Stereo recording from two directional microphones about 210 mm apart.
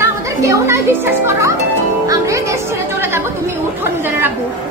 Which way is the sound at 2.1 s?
15° right (ahead or behind).